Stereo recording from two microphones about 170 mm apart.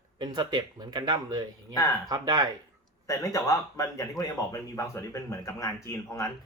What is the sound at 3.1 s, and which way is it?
Speech, 20° left (ahead or behind).